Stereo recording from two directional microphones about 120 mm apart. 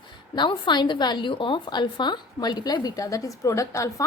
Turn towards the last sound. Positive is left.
turn(degrees=25)  # may be behind; listen again after turning